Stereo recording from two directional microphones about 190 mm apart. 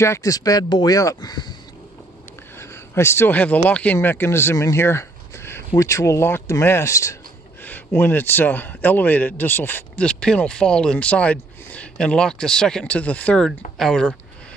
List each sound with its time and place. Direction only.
0.0 s speech: 15° left (ahead or behind)
2.6 s a man's voice: 15° left (ahead or behind)